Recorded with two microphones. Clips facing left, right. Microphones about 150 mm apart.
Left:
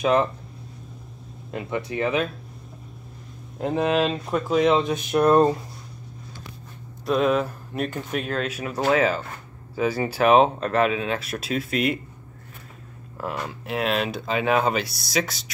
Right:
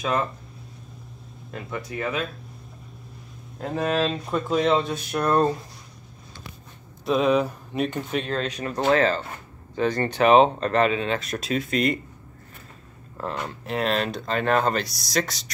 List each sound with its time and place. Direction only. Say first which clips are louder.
0.0 s speech: left 5 dB; 20° left (ahead or behind)
1.9 s speech: left 4 dB; 20° left (ahead or behind)
3.5 s speech: left 3 dB; 20° left (ahead or behind)
4.1 s speech: left 2 dB; 5° left (ahead or behind)
4.7 s speech: left 4 dB; 20° left (ahead or behind)
7.1 s speech: right 1 dB; centre (ahead or behind)
13.2 s speech: even; 5° left (ahead or behind)